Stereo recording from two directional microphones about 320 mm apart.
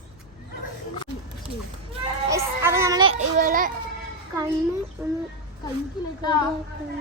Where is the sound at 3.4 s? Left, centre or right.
Right.